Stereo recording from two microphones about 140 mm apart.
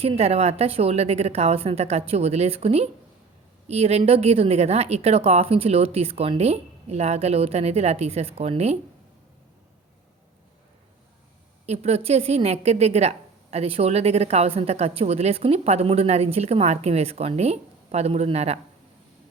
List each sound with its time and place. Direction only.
0.0 s speech: 45° right (ahead or behind)
11.6 s speech: 50° right (ahead or behind)